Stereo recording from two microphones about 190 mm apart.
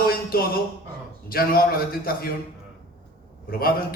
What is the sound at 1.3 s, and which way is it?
Speech, 50° left (ahead or behind).